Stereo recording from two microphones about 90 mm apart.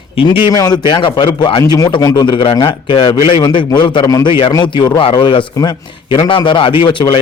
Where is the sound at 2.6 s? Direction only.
70° left (ahead or behind).